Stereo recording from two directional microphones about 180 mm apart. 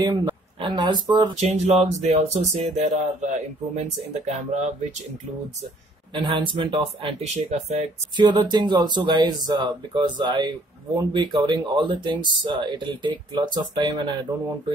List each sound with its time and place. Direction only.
0.0 s speech: 25° right (ahead or behind)
1.3 s speech: 40° right (ahead or behind)
6.1 s speech: 25° right (ahead or behind)
8.2 s speech: 25° right (ahead or behind)